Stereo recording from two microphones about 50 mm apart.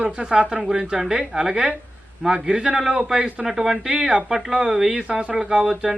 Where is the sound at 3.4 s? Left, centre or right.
Centre.